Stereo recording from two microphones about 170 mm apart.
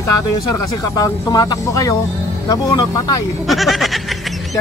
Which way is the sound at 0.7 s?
20° left (ahead or behind).